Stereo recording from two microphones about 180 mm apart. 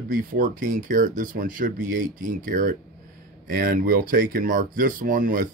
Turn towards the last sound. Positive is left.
turn(degrees=-50)  # may be behind; listen again after turning